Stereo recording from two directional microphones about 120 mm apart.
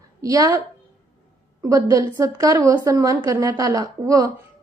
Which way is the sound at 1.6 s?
30° right (ahead or behind).